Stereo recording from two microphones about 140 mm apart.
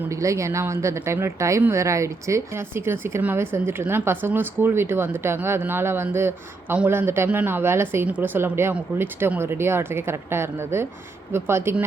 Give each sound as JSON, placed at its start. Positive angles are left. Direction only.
{"t": 0.1, "sound": "speech", "side_deg": -20}